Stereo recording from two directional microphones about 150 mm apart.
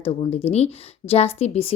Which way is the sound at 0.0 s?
40° left (ahead or behind).